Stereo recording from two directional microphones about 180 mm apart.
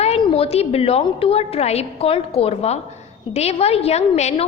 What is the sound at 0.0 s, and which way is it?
A woman's voice, 35° left (ahead or behind).